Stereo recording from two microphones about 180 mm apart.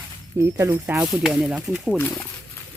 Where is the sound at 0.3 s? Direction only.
15° right (ahead or behind).